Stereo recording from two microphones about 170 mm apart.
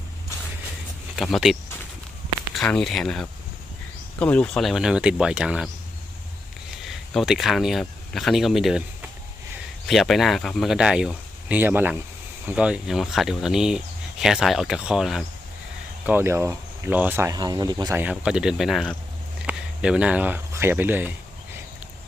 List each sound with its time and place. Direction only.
1.1 s speech: centre (ahead or behind)
6.8 s speech: centre (ahead or behind)
16.0 s speech: 15° right (ahead or behind)
18.0 s speech: 5° right (ahead or behind)